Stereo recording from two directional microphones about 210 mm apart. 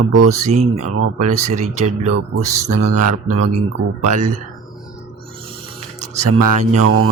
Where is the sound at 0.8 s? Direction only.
90° right.